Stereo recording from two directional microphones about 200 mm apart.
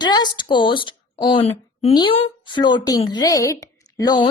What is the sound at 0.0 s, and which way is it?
A woman's voice, 20° left (ahead or behind).